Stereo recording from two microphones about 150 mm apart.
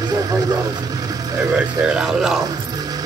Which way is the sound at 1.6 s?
5° right (ahead or behind).